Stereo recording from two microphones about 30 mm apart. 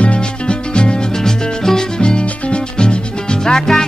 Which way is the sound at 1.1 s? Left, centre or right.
Centre.